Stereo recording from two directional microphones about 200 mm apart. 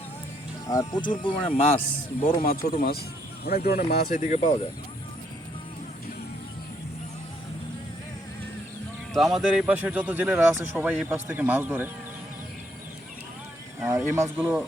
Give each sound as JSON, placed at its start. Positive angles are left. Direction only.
{"t": 0.7, "sound": "speech", "side_deg": 20}
{"t": 2.4, "sound": "speech", "side_deg": 45}
{"t": 4.2, "sound": "speech", "side_deg": 35}
{"t": 9.1, "sound": "speech", "side_deg": 0}
{"t": 13.7, "sound": "speech", "side_deg": -10}